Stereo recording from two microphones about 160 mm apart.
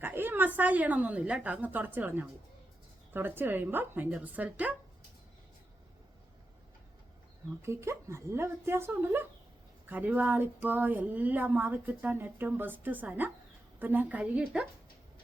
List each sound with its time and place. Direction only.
0.0 s a woman's voice: 15° right (ahead or behind)
7.6 s speech: 15° right (ahead or behind)